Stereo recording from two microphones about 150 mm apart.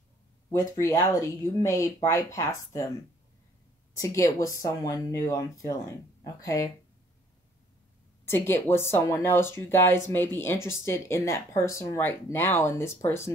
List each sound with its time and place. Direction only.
0.5 s speech: 20° left (ahead or behind)
3.9 s speech: 20° left (ahead or behind)
8.3 s speech: 15° left (ahead or behind)